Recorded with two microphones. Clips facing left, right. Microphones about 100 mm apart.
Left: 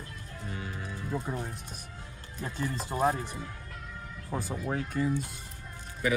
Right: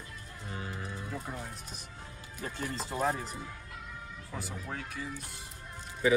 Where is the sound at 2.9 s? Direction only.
30° left (ahead or behind).